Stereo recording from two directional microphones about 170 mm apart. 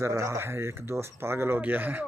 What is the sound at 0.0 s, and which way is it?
Speech, 15° right (ahead or behind).